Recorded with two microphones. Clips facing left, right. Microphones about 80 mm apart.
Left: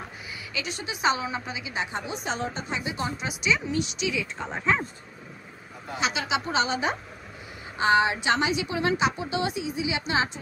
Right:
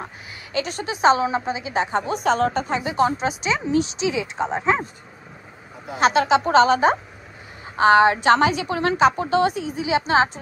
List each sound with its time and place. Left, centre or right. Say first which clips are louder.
0.0 s a woman's voice: right 3 dB; right
5.9 s a woman's voice: right 10 dB; right